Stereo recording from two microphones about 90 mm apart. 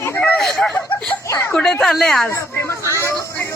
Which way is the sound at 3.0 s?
30° left (ahead or behind).